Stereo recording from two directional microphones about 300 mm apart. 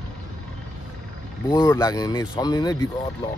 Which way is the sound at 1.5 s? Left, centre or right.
Centre.